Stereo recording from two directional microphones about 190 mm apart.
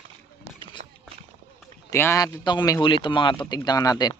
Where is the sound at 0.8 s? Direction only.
35° right (ahead or behind).